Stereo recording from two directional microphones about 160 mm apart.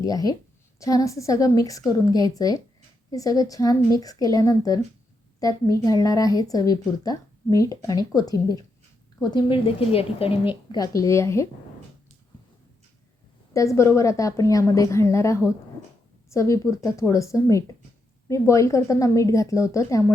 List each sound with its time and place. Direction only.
0.0 s a woman's voice: 25° left (ahead or behind)
10.7 s a woman's voice: 20° left (ahead or behind)
13.5 s a woman's voice: 20° left (ahead or behind)